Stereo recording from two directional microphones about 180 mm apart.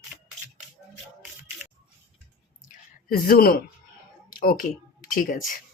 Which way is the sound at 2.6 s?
55° left (ahead or behind).